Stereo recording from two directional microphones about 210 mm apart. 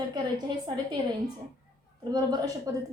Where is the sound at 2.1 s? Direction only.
20° right (ahead or behind).